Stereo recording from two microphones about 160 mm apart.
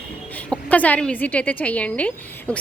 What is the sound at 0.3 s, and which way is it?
A woman's voice, 10° left (ahead or behind).